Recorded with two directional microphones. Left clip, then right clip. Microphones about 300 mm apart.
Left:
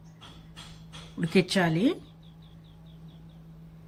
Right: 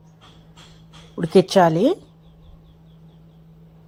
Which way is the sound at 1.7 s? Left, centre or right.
Centre.